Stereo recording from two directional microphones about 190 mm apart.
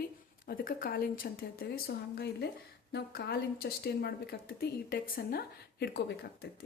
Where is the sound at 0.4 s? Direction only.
50° left (ahead or behind).